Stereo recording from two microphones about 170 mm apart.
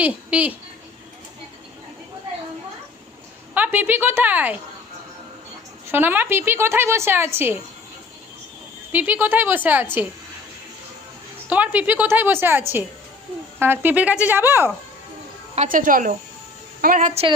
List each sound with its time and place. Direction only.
0.0 s speech: 10° right (ahead or behind)
3.5 s speech: 10° right (ahead or behind)
5.9 s speech: 10° right (ahead or behind)
8.9 s speech: 10° right (ahead or behind)
11.4 s speech: 10° right (ahead or behind)
15.5 s a woman's voice: 50° right (ahead or behind)